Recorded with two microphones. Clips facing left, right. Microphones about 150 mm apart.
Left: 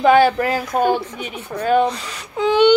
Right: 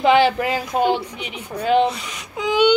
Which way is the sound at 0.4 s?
15° right (ahead or behind).